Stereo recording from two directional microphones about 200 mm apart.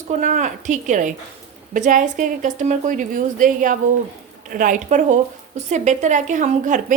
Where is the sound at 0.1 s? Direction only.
40° right (ahead or behind).